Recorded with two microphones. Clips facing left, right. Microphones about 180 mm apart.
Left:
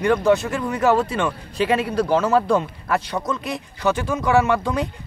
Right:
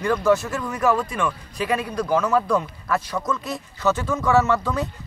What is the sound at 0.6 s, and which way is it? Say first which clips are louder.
Speech: left 3 dB; 25° left (ahead or behind).